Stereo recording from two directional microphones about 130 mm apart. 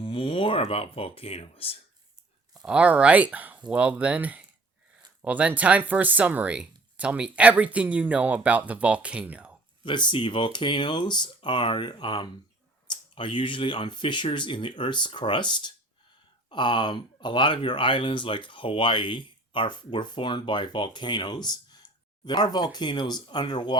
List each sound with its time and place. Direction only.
0.0 s speech: 40° left (ahead or behind)
2.6 s speech: 10° right (ahead or behind)
9.8 s speech: 35° left (ahead or behind)